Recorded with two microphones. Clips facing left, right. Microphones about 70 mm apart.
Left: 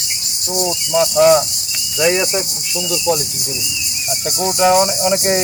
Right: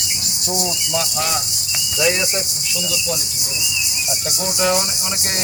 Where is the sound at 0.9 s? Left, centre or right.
Centre.